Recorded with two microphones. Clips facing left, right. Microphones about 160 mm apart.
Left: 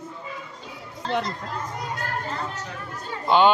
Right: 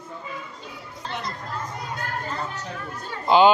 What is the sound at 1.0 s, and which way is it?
Speech, 90° left.